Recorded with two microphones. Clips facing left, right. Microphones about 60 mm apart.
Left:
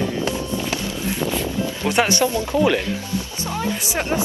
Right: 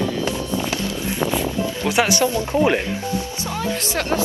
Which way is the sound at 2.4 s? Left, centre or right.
Right.